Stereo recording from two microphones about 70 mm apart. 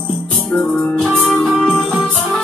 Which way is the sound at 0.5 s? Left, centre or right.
Left.